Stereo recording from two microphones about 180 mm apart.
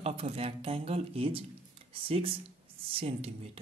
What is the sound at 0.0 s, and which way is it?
Speech, 35° right (ahead or behind).